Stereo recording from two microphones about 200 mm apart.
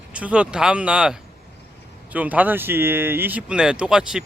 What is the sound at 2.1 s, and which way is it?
Speech, 10° right (ahead or behind).